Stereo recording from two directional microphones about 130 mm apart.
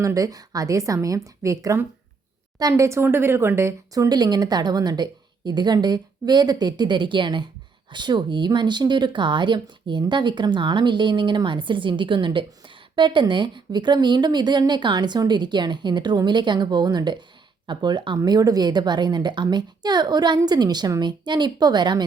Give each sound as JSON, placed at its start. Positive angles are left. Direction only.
{"t": 0.0, "sound": "speech", "side_deg": -25}